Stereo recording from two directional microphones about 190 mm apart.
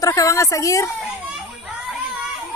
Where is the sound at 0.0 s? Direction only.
20° left (ahead or behind).